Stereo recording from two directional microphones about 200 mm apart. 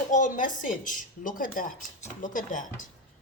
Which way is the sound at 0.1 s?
40° left (ahead or behind).